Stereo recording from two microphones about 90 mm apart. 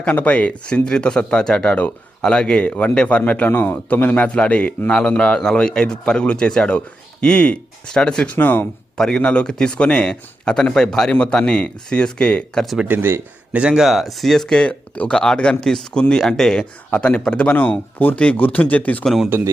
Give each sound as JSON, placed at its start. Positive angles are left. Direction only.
{"t": 0.0, "sound": "speech", "side_deg": 15}
{"t": 12.6, "sound": "speech", "side_deg": -5}
{"t": 12.9, "sound": "speech", "side_deg": -25}
{"t": 13.6, "sound": "speech", "side_deg": -10}
{"t": 19.0, "sound": "speech", "side_deg": 0}